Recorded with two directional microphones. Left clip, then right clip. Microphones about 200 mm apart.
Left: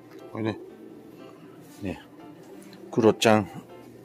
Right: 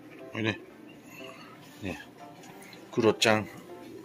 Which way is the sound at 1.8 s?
25° left (ahead or behind).